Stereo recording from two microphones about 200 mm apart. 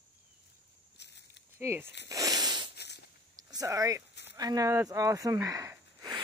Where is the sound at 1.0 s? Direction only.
60° left (ahead or behind).